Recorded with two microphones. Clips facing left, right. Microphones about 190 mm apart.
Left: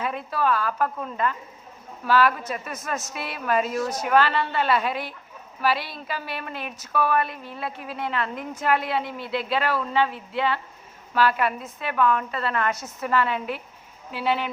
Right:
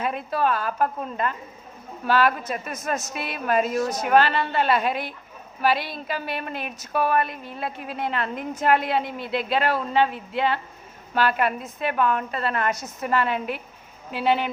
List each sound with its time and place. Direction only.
0.0 s a woman's voice: 20° right (ahead or behind)